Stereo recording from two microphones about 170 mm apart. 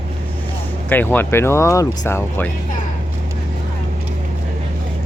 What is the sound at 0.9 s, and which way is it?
Speech, 10° left (ahead or behind).